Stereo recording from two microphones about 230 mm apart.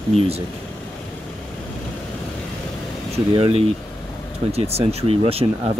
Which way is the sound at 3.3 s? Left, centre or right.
Right.